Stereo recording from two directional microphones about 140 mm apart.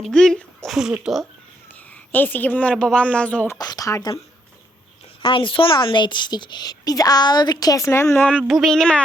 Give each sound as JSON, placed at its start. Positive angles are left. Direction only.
{"t": 0.0, "sound": "speech", "side_deg": 5}
{"t": 1.6, "sound": "a woman's voice", "side_deg": 10}
{"t": 3.6, "sound": "a woman's voice", "side_deg": 25}
{"t": 5.2, "sound": "a woman's voice", "side_deg": 35}
{"t": 8.4, "sound": "speech", "side_deg": 0}